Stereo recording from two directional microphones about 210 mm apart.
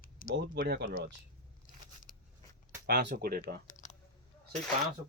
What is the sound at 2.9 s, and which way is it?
Speech, 50° right (ahead or behind).